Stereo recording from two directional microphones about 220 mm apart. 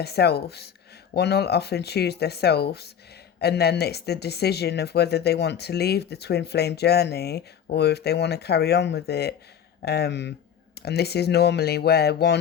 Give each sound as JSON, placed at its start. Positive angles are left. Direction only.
{"t": 0.0, "sound": "speech", "side_deg": 45}